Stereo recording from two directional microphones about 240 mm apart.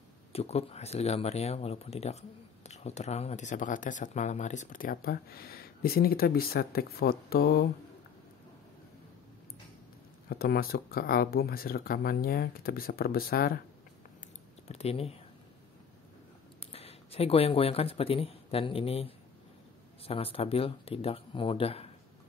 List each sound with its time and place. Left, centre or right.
0.3 s speech: left
10.3 s speech: left
14.7 s speech: left
16.5 s speech: left